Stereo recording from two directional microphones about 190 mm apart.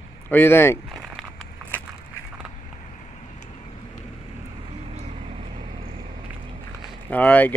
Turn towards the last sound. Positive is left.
turn(degrees=10)  # may be behind; listen again after turning